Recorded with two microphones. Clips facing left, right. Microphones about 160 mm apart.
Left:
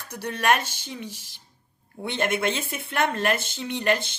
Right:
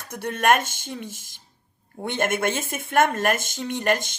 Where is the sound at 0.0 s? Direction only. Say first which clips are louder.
Right 3 dB; 50° right (ahead or behind).